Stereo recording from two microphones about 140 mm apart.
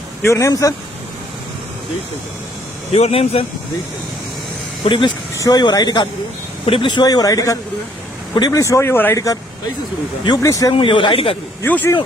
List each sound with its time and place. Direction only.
0.2 s speech: 20° left (ahead or behind)
2.9 s speech: 50° left (ahead or behind)
4.9 s speech: 35° left (ahead or behind)
10.8 s speech: 35° left (ahead or behind)
11.6 s speech: 15° left (ahead or behind)